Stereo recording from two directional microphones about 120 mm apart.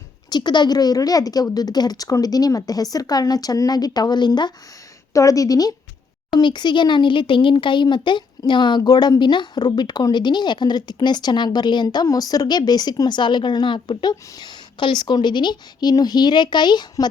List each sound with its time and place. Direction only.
0.3 s speech: 35° left (ahead or behind)